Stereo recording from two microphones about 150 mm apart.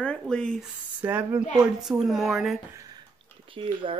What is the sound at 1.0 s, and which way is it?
A woman's voice, 10° right (ahead or behind).